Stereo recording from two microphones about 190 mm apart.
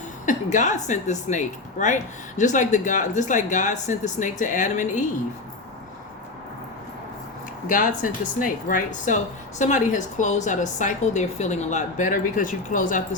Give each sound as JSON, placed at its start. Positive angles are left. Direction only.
{"t": 0.3, "sound": "speech", "side_deg": 40}
{"t": 7.7, "sound": "speech", "side_deg": 45}